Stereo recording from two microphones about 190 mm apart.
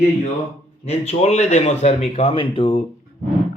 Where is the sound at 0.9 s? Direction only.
35° left (ahead or behind).